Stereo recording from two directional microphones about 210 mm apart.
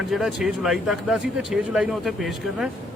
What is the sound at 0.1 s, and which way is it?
A man's voice, centre (ahead or behind).